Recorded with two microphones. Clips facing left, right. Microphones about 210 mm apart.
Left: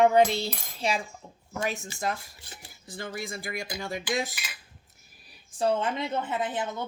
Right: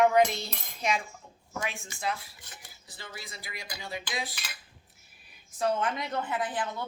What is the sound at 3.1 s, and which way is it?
Dishes, 50° left (ahead or behind).